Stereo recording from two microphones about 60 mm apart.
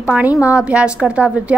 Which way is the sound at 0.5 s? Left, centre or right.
Centre.